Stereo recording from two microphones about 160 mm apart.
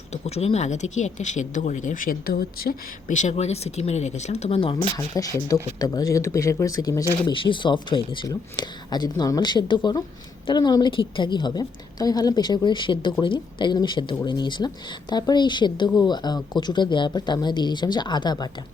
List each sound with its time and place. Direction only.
0.1 s speech: 40° left (ahead or behind)
5.2 s a woman's voice: 20° left (ahead or behind)